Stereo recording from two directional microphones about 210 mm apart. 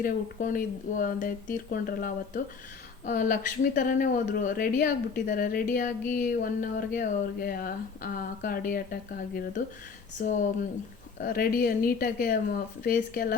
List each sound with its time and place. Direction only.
0.0 s speech: 40° left (ahead or behind)